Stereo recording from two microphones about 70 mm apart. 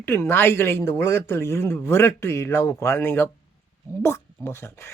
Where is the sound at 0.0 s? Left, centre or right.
Left.